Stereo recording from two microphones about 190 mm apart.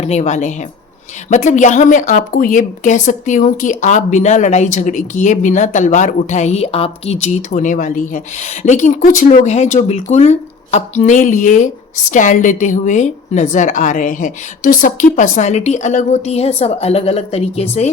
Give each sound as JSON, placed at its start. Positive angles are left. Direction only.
{"t": 0.0, "sound": "speech", "side_deg": 35}